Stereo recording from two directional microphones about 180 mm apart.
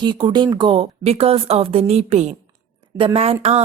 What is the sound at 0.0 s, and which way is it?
Speech, 25° right (ahead or behind).